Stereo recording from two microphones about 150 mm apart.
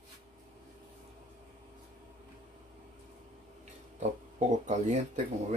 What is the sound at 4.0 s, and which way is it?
Speech, 50° right (ahead or behind).